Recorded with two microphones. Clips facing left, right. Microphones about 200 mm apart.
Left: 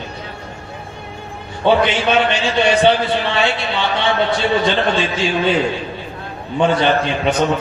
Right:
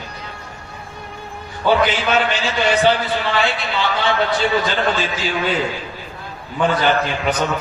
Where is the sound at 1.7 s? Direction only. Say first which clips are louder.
Left 2 dB; 25° left (ahead or behind).